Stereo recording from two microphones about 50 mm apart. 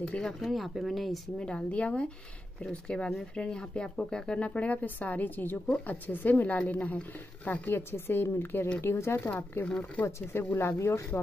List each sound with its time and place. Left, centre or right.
0.2 s speech: centre
1.4 s a woman's voice: left
7.6 s a woman's voice: left
9.3 s a woman's voice: left
10.0 s a woman's voice: left
10.8 s speech: left